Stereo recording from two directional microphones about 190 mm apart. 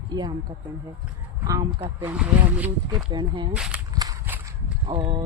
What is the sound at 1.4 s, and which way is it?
Speech, 20° right (ahead or behind).